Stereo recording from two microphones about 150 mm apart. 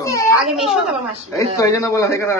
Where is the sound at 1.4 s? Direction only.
20° left (ahead or behind).